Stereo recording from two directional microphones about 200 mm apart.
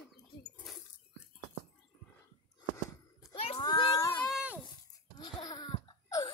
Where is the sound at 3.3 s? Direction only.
25° left (ahead or behind).